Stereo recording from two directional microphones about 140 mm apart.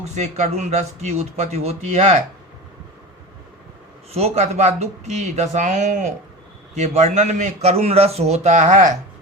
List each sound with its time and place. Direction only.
0.0 s a man's voice: 55° right (ahead or behind)
4.1 s a man's voice: 50° right (ahead or behind)